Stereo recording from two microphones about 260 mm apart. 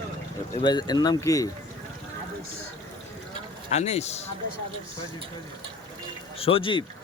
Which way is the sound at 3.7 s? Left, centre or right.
Left.